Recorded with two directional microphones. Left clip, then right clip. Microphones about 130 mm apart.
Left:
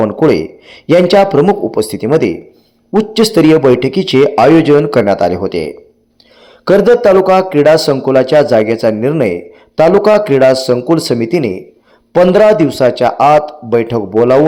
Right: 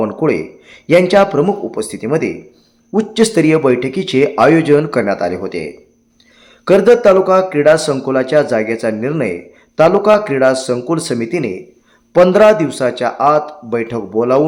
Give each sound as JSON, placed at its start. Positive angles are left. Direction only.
{"t": 0.0, "sound": "speech", "side_deg": 15}
{"t": 0.3, "sound": "a man's voice", "side_deg": 30}